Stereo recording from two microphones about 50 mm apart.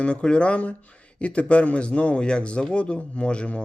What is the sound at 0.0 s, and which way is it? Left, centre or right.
Speech, left.